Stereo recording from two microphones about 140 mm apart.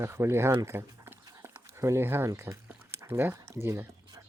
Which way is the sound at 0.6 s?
20° right (ahead or behind).